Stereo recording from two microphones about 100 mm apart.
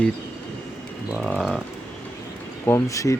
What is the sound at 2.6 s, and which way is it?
Speech, 30° left (ahead or behind).